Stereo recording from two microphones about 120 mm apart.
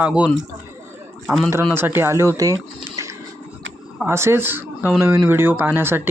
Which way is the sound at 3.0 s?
25° right (ahead or behind).